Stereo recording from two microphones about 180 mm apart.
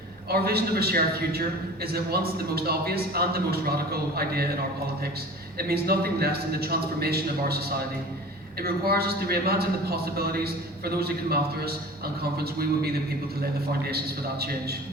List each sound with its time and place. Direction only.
0.3 s a man's voice: 60° right (ahead or behind)
5.5 s a man's voice: 60° right (ahead or behind)
13.9 s a man's voice: 60° right (ahead or behind)